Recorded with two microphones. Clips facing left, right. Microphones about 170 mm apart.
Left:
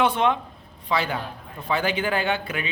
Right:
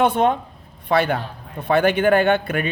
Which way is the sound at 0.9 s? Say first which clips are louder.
Right 6 dB; 60° right (ahead or behind).